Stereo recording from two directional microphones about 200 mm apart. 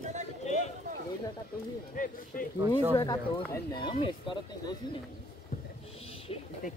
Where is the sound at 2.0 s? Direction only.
40° left (ahead or behind).